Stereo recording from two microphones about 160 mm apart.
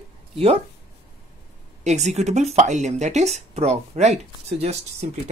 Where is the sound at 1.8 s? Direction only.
45° right (ahead or behind).